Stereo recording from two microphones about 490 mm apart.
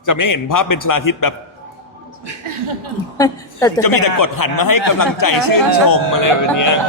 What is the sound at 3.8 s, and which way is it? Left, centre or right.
A man's voice, left.